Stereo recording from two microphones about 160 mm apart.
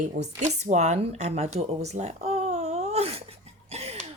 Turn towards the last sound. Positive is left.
turn(degrees=-40)  # may be behind; listen again after turning